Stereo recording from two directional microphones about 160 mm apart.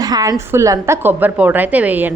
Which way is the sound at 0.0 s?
25° right (ahead or behind).